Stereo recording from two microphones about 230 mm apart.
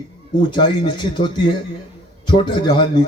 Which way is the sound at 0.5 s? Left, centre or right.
Centre.